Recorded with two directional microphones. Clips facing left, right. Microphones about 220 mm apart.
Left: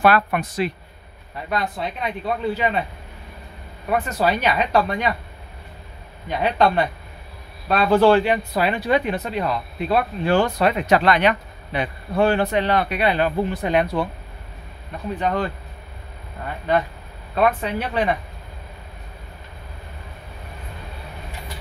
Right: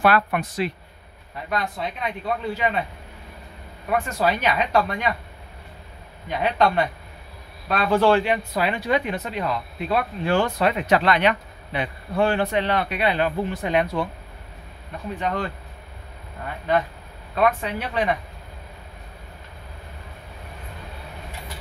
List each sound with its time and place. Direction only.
0.0 s speech: 45° left (ahead or behind)
1.5 s speech: 35° left (ahead or behind)
3.9 s speech: 35° left (ahead or behind)
6.3 s speech: 35° left (ahead or behind)
15.1 s speech: 35° left (ahead or behind)
17.4 s speech: 30° left (ahead or behind)